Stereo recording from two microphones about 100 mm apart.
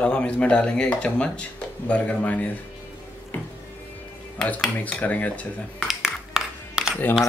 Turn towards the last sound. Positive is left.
turn(degrees=-5)  # may be behind; listen again after turning